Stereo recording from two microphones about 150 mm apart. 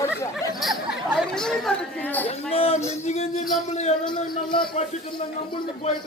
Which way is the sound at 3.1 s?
50° left (ahead or behind).